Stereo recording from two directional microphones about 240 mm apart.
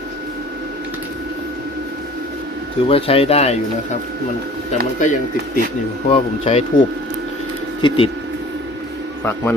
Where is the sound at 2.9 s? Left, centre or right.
Left.